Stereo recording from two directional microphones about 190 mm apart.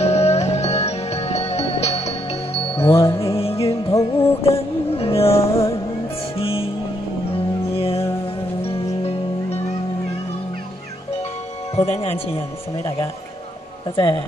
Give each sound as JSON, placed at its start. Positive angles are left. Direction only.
{"t": 0.0, "sound": "music", "side_deg": 35}
{"t": 3.9, "sound": "music", "side_deg": 10}
{"t": 4.4, "sound": "music", "side_deg": 30}
{"t": 7.7, "sound": "music", "side_deg": 30}
{"t": 11.7, "sound": "music", "side_deg": 30}